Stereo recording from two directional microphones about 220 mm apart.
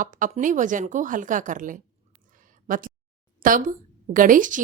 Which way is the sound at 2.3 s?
35° right (ahead or behind).